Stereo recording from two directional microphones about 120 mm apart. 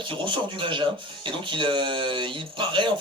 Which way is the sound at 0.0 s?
45° right (ahead or behind).